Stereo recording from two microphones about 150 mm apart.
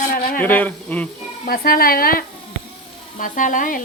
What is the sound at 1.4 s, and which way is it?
Speech, 75° left (ahead or behind).